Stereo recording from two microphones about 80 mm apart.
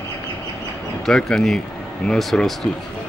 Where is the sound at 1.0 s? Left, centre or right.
Centre.